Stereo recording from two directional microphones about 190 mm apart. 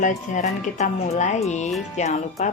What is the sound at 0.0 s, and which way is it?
Speech, 40° left (ahead or behind).